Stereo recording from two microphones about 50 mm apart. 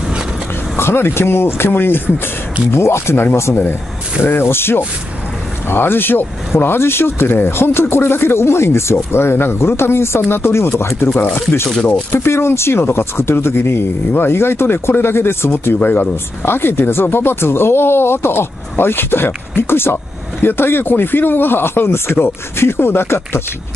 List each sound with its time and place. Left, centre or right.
0.7 s speech: left
2.7 s speech: left
4.2 s speech: left
11.3 s speech: left
12.1 s speech: left
15.8 s speech: left
16.4 s speech: left